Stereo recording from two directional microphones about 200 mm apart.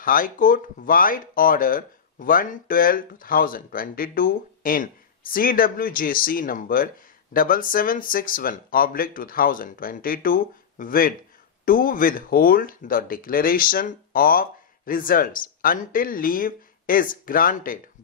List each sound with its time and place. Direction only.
0.0 s speech: 45° left (ahead or behind)